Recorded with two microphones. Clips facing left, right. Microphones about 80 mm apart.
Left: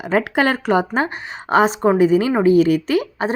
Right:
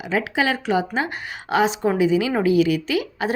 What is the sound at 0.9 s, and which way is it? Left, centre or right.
A woman's voice, left.